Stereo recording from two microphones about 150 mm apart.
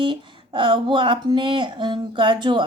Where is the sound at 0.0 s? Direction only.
35° right (ahead or behind).